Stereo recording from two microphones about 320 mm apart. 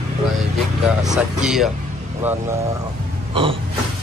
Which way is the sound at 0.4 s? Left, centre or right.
Centre.